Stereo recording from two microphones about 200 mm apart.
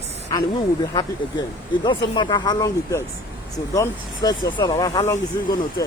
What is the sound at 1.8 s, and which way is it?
Speech, 25° left (ahead or behind).